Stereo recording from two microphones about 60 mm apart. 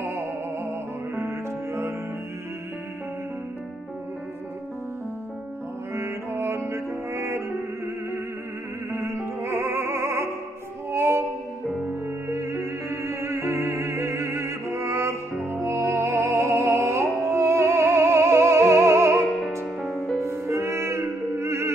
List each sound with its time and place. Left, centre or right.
0.7 s music: right
5.9 s music: right
8.9 s music: right
12.3 s music: right